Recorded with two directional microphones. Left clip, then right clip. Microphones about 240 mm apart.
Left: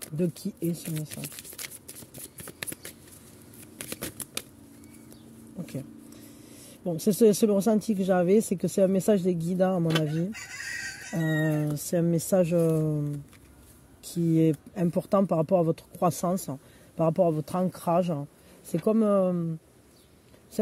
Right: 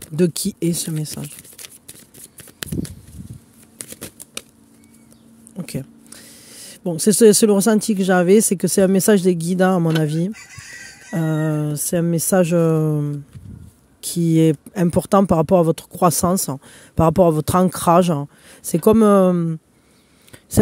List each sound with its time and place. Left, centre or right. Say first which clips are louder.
0.1 s speech: right 12 dB; right
5.6 s a sound: right 8 dB; right
6.5 s speech: right 7 dB; right
14.1 s speech: right 8 dB; right